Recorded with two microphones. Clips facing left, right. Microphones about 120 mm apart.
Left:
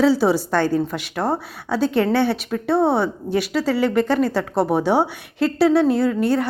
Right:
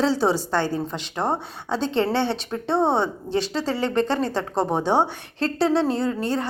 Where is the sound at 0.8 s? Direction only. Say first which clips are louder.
Left 3 dB; 20° right (ahead or behind).